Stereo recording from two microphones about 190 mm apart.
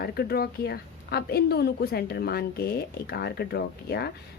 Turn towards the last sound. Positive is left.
turn(degrees=60)  # may be behind; listen again after turning